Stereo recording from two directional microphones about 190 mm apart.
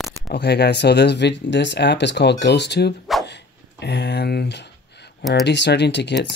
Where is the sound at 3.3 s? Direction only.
65° left (ahead or behind).